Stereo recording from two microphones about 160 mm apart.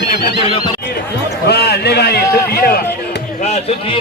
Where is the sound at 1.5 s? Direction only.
85° left.